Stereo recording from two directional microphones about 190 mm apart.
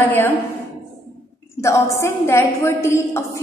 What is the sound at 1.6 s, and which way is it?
A woman's voice, 15° left (ahead or behind).